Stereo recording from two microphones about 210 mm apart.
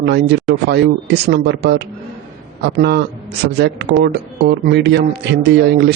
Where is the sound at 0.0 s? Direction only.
50° right (ahead or behind).